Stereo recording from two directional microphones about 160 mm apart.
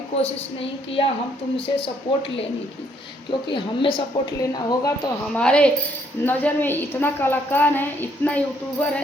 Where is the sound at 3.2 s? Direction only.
30° left (ahead or behind).